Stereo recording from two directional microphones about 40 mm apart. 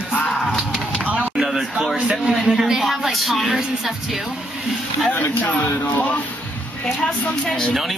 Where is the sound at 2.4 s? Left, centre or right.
Centre.